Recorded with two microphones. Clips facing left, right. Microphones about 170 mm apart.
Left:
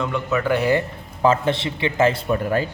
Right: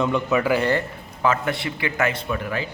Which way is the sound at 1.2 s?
30° left (ahead or behind).